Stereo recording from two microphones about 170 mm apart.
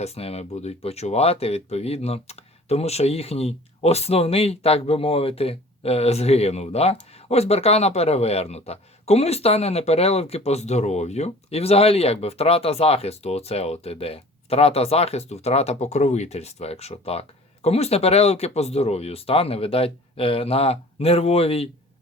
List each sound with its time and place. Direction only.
0.0 s speech: 35° left (ahead or behind)